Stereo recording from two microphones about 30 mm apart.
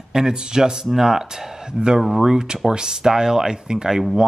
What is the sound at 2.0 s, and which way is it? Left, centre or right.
Speech, centre.